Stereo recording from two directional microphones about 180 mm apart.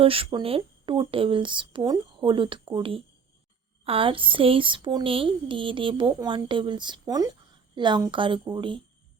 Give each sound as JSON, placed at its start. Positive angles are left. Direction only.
{"t": 0.0, "sound": "speech", "side_deg": -30}